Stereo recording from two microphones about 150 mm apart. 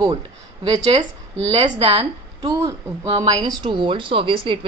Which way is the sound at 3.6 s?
30° right (ahead or behind).